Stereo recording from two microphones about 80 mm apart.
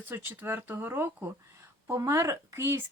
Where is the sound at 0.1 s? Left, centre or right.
Right.